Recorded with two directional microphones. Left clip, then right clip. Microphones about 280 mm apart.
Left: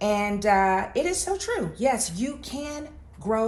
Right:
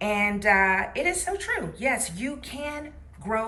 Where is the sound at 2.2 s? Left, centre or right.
Centre.